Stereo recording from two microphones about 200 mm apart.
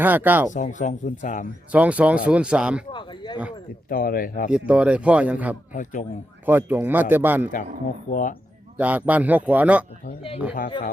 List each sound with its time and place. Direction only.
0.0 s a man's voice: 10° right (ahead or behind)
0.5 s speech: 40° left (ahead or behind)
1.7 s a man's voice: 5° right (ahead or behind)
3.8 s speech: 45° left (ahead or behind)
4.5 s a man's voice: 5° right (ahead or behind)
5.7 s speech: 40° left (ahead or behind)
6.4 s a man's voice: 10° right (ahead or behind)
8.1 s speech: 40° left (ahead or behind)
8.8 s a man's voice: 10° right (ahead or behind)